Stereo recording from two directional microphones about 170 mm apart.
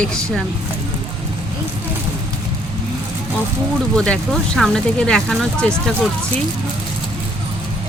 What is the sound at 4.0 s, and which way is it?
Speech, 5° left (ahead or behind).